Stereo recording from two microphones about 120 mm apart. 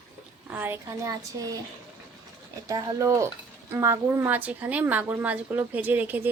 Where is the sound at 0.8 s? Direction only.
30° right (ahead or behind).